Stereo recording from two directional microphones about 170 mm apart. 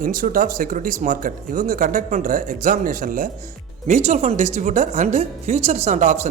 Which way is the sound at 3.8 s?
40° right (ahead or behind).